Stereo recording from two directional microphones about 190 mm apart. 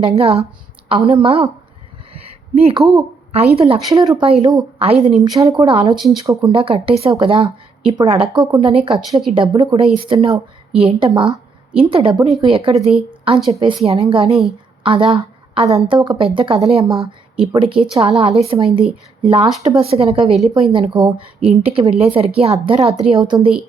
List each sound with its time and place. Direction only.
0.2 s a woman's voice: 30° right (ahead or behind)
2.1 s a sound: 30° right (ahead or behind)
2.9 s a woman's voice: 30° right (ahead or behind)
3.9 s speech: 20° right (ahead or behind)
4.3 s a woman's voice: 30° right (ahead or behind)
5.4 s speech: 20° right (ahead or behind)
5.6 s speech: 30° right (ahead or behind)
6.2 s speech: 15° right (ahead or behind)
6.5 s a woman's voice: 30° right (ahead or behind)
19.8 s speech: 30° right (ahead or behind)